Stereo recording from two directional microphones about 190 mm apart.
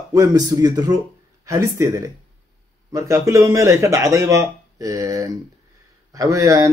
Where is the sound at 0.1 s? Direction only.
20° right (ahead or behind).